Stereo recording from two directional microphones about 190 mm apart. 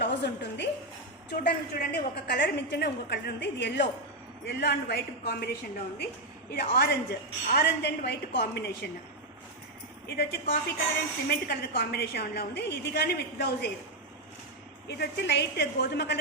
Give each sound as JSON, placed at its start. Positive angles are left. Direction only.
{"t": 0.0, "sound": "a sound", "side_deg": 65}
{"t": 1.5, "sound": "a woman's voice", "side_deg": 60}
{"t": 10.1, "sound": "a woman's voice", "side_deg": 55}
{"t": 14.8, "sound": "a woman's voice", "side_deg": 60}